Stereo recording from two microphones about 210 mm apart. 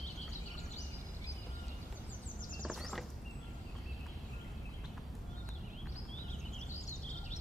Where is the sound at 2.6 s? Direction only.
Centre (ahead or behind).